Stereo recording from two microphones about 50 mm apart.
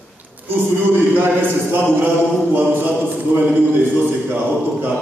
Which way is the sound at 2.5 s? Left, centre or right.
Right.